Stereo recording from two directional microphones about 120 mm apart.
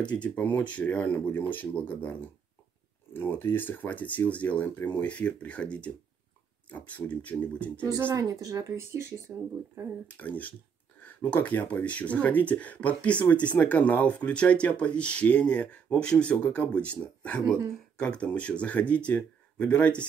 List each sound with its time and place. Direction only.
0.1 s speech: 10° left (ahead or behind)
8.0 s speech: 25° right (ahead or behind)
10.0 s speech: 15° left (ahead or behind)